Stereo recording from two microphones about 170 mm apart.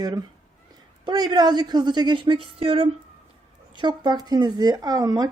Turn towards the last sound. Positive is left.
turn(degrees=-20)  # may be behind; listen again after turning